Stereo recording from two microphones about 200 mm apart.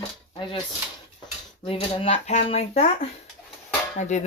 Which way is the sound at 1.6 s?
30° left (ahead or behind).